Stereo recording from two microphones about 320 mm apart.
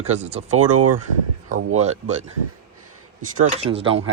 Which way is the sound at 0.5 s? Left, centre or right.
Right.